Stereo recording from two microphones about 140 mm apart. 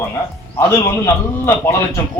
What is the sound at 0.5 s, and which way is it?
Speech, 20° left (ahead or behind).